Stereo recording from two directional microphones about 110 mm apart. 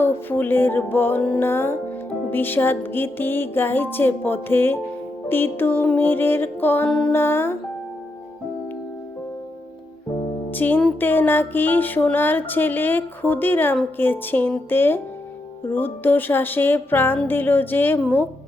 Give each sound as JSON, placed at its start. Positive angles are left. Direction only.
{"t": 0.0, "sound": "music", "side_deg": 20}
{"t": 10.5, "sound": "music", "side_deg": 15}